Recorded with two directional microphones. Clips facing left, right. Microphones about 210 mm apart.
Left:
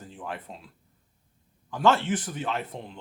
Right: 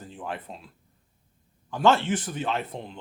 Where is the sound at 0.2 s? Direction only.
25° right (ahead or behind).